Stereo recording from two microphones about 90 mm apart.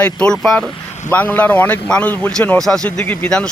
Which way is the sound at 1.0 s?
20° left (ahead or behind).